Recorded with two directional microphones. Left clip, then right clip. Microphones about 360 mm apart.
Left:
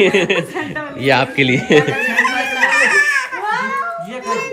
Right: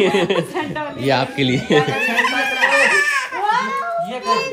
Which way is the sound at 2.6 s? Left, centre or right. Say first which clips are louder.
Left 2 dB; centre.